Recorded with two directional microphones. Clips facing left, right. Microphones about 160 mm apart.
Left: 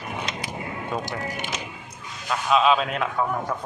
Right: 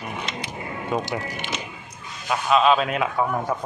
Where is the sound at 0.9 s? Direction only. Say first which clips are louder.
Right 4 dB; 5° right (ahead or behind).